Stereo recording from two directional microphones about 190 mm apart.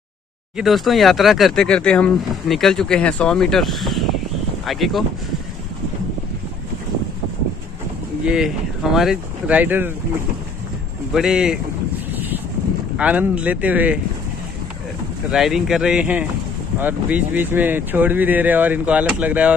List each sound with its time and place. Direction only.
0.6 s speech: centre (ahead or behind)
8.3 s speech: centre (ahead or behind)
11.1 s speech: 5° right (ahead or behind)
12.1 s boat: 10° right (ahead or behind)
12.9 s speech: 5° right (ahead or behind)
15.3 s speech: centre (ahead or behind)